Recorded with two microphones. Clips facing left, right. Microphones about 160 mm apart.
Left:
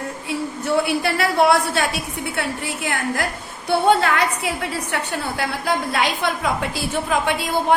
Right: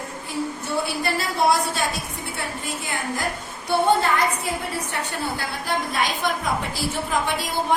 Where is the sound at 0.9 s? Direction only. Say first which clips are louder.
Left 5 dB; 65° left (ahead or behind).